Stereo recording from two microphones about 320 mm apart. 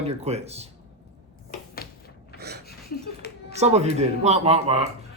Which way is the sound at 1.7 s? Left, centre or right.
Left.